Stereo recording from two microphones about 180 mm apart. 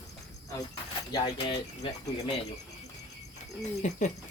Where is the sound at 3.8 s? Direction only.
40° left (ahead or behind).